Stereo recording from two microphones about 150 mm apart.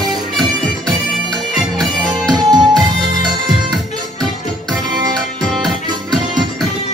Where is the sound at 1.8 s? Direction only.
Centre (ahead or behind).